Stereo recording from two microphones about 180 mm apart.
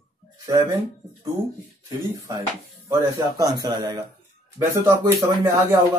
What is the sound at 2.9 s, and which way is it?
Speech, 20° right (ahead or behind).